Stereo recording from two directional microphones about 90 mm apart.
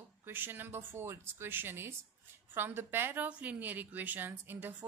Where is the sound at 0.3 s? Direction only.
25° right (ahead or behind).